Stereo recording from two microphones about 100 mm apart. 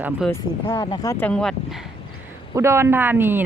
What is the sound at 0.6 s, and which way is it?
Speech, 60° left (ahead or behind).